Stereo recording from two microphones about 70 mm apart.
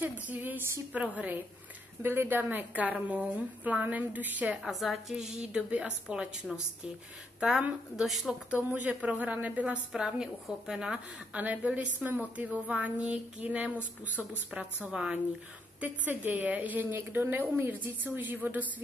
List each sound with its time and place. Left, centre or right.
0.0 s a sound: right
0.9 s a woman's voice: right
4.6 s a woman's voice: centre
8.5 s a woman's voice: right
9.9 s a woman's voice: centre
15.8 s a woman's voice: right